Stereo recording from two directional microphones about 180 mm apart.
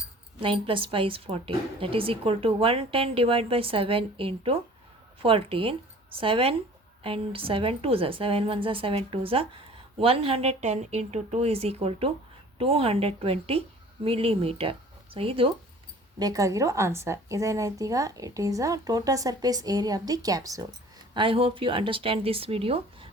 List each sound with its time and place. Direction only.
0.3 s a woman's voice: 30° right (ahead or behind)
16.1 s a woman's voice: 20° right (ahead or behind)